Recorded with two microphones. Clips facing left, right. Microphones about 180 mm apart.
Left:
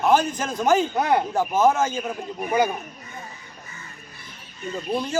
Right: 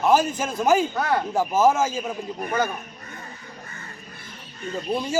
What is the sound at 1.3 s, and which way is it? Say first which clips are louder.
A man's voice: right 4 dB; 5° right (ahead or behind).